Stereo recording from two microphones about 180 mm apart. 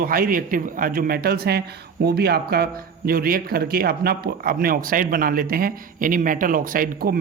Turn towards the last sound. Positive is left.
turn(degrees=-50)  # may be behind; listen again after turning